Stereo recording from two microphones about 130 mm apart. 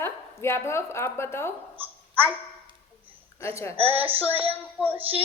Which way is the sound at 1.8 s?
15° right (ahead or behind).